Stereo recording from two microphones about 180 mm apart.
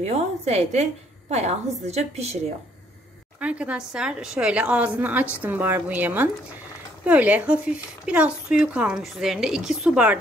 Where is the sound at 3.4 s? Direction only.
5° right (ahead or behind).